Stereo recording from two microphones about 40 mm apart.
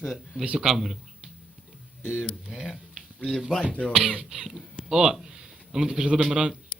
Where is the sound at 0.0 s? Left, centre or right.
Centre.